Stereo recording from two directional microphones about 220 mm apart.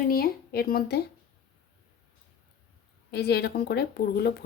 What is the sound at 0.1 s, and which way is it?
Speech, 45° left (ahead or behind).